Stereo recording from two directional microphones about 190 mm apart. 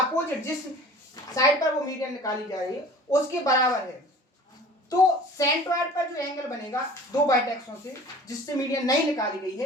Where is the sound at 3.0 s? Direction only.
15° left (ahead or behind).